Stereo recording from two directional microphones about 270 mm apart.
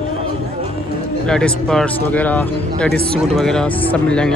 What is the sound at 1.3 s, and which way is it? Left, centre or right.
Speech, centre.